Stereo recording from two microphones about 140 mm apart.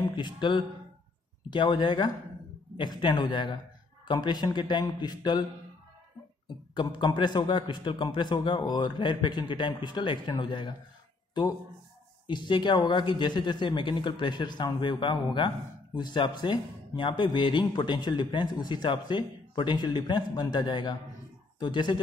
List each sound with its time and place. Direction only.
0.1 s speech: 35° left (ahead or behind)
6.7 s speech: 35° left (ahead or behind)
12.3 s speech: 35° left (ahead or behind)